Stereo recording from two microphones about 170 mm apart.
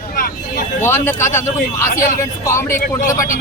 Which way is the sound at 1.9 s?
55° left (ahead or behind).